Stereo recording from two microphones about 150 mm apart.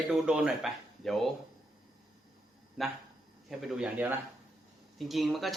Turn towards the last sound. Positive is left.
turn(degrees=0)  # may be behind; listen again after turning